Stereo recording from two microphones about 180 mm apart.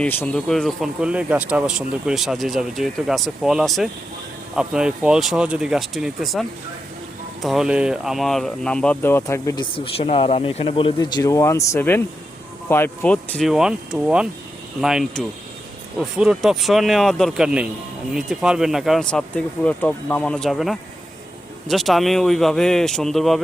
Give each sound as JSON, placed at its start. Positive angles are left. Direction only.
{"t": 0.0, "sound": "speech", "side_deg": 10}
{"t": 7.4, "sound": "speech", "side_deg": -5}
{"t": 9.7, "sound": "speech", "side_deg": 30}